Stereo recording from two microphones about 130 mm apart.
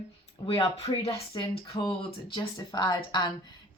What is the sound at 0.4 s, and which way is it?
Speech, 45° left (ahead or behind).